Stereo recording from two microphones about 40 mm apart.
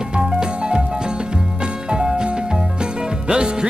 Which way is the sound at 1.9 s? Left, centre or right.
Right.